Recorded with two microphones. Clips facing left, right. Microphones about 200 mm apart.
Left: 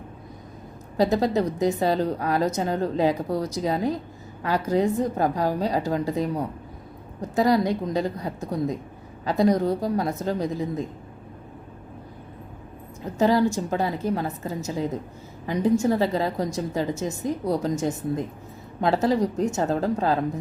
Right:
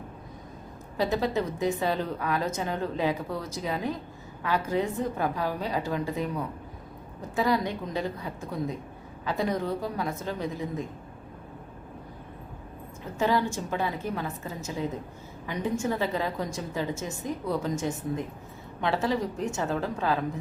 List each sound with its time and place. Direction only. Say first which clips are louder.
0.9 s a woman's voice: left 5 dB; 40° left (ahead or behind)
13.1 s a woman's voice: left 6 dB; 40° left (ahead or behind)